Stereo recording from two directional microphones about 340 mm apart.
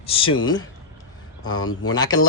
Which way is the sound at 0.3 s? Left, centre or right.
Left.